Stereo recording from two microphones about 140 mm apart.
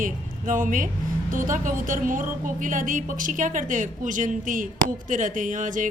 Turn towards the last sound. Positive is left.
turn(degrees=-70)  # may be behind; listen again after turning